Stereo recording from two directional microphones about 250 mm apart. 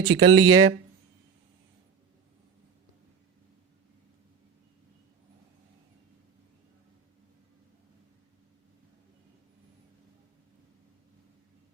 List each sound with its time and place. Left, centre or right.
0.0 s speech: centre